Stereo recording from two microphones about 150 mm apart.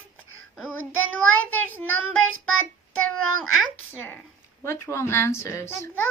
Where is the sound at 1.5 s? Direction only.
10° left (ahead or behind).